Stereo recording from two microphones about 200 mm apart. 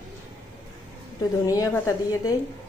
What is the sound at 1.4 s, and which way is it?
Speech, 15° left (ahead or behind).